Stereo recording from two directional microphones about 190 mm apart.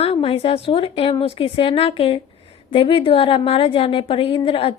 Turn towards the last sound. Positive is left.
turn(degrees=30)  # may be behind; listen again after turning